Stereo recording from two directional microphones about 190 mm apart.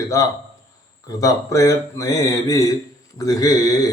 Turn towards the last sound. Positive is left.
turn(degrees=20)  # may be behind; listen again after turning